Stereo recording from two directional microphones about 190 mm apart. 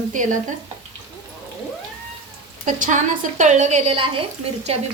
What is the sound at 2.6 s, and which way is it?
A woman's voice, 45° right (ahead or behind).